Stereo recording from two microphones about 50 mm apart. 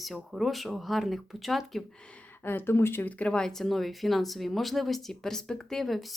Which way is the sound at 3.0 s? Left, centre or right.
Left.